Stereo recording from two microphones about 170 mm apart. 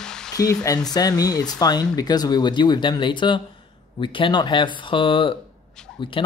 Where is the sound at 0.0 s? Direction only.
5° left (ahead or behind).